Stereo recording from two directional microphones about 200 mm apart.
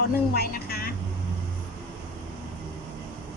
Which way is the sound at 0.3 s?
50° left (ahead or behind).